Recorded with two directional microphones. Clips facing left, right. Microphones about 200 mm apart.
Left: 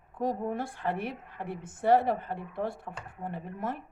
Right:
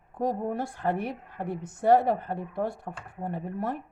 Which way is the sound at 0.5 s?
40° right (ahead or behind).